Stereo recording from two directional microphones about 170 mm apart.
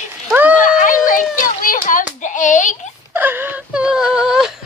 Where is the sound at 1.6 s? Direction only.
55° left (ahead or behind).